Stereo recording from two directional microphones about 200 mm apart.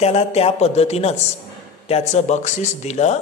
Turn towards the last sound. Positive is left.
turn(degrees=35)  # may be behind; listen again after turning